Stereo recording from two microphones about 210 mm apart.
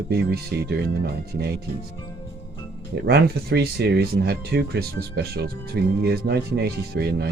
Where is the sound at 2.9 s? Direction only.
50° right (ahead or behind).